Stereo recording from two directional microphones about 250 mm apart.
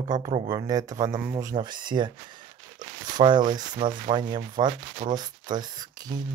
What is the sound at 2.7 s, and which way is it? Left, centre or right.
Sanding, centre.